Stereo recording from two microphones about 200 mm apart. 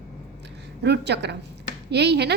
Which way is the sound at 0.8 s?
60° right (ahead or behind).